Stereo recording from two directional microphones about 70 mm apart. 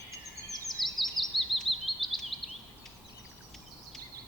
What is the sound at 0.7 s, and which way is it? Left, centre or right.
Bird vocalization, centre.